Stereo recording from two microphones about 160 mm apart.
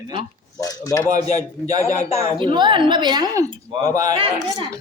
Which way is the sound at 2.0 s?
40° left (ahead or behind).